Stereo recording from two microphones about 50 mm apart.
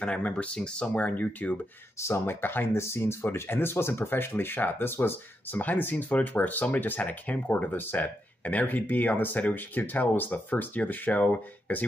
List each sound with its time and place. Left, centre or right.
0.0 s speech: left
2.1 s speech: left
5.6 s speech: left